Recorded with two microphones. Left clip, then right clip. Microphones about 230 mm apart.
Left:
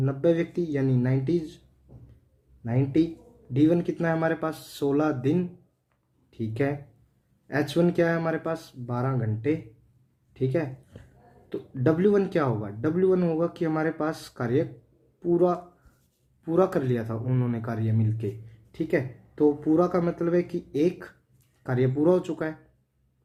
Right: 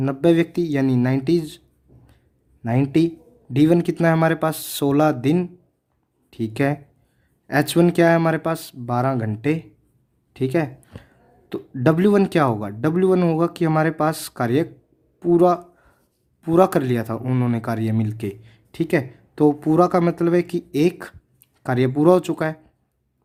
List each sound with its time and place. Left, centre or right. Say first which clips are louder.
0.0 s speech: right 6 dB; right
2.6 s speech: right 6 dB; right